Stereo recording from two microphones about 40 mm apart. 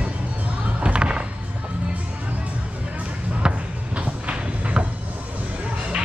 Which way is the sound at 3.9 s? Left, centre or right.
Right.